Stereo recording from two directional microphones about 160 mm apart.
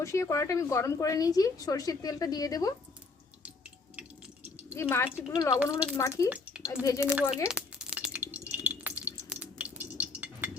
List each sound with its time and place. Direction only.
0.0 s a woman's voice: 20° left (ahead or behind)
4.7 s a woman's voice: 15° left (ahead or behind)
6.2 s speech: 10° right (ahead or behind)
7.4 s a sound: 5° right (ahead or behind)